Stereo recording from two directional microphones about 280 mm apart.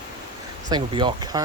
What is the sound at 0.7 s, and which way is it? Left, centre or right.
Speech, centre.